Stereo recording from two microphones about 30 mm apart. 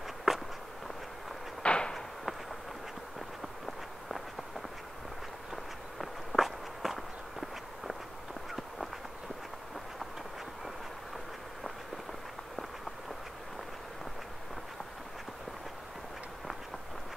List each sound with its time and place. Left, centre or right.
0.3 s walk: centre
1.6 s a sound: left
5.5 s walk: centre